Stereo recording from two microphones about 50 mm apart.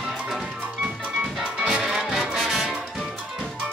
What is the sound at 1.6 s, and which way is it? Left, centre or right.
Music, centre.